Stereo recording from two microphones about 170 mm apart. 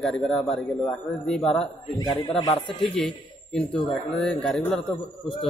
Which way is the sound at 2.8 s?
Centre (ahead or behind).